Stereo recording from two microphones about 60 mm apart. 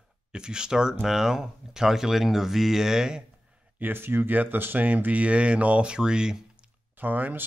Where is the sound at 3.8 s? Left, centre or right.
Right; by 6.4 s centre.